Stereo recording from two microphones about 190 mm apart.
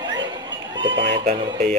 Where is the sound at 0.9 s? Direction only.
65° right (ahead or behind).